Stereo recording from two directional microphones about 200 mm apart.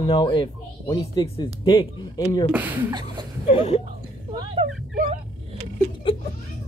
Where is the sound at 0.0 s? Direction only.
25° left (ahead or behind).